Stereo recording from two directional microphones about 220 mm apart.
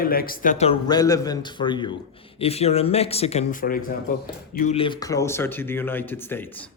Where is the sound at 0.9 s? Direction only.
15° left (ahead or behind).